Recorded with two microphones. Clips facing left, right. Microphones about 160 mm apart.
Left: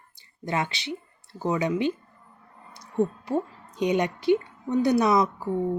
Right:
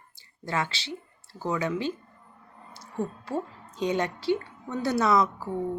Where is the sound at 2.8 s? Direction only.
15° left (ahead or behind).